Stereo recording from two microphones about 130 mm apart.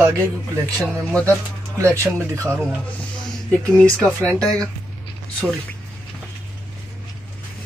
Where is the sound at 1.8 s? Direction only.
20° right (ahead or behind).